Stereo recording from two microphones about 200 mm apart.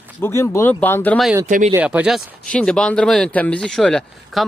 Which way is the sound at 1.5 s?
40° right (ahead or behind).